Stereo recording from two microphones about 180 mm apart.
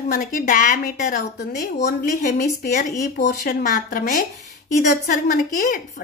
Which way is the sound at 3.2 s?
60° left (ahead or behind).